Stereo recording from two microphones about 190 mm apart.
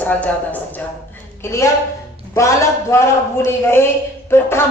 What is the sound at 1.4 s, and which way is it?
A woman's voice, 15° left (ahead or behind).